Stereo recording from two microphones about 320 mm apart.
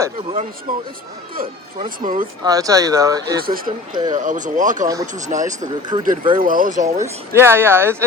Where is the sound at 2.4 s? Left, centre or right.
Centre.